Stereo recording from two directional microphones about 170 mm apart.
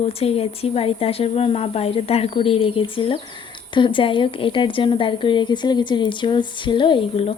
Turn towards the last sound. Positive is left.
turn(degrees=35)  # may be behind; listen again after turning